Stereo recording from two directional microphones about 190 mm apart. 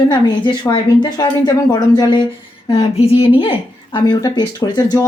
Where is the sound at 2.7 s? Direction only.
30° left (ahead or behind).